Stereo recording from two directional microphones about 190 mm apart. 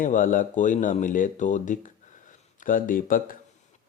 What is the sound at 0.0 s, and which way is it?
Speech, 45° left (ahead or behind).